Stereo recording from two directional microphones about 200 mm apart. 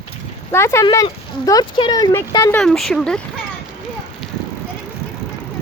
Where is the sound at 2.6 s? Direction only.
Centre (ahead or behind).